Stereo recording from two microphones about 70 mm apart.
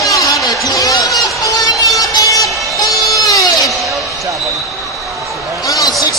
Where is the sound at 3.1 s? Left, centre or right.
Left.